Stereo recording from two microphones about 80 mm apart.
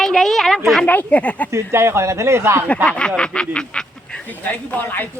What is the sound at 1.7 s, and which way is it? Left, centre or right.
Speech, right.